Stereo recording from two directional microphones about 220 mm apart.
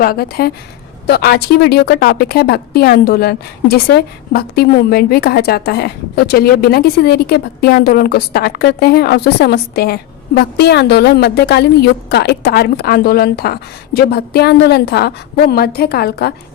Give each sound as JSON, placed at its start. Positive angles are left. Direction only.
{"t": 0.0, "sound": "a woman's voice", "side_deg": 45}